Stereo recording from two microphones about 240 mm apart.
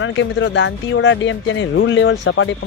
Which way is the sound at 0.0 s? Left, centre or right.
Left.